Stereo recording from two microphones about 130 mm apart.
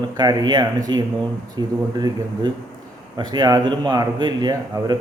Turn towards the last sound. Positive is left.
turn(degrees=-35)  # may be behind; listen again after turning